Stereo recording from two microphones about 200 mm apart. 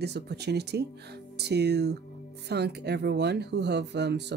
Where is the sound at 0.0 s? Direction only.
55° right (ahead or behind).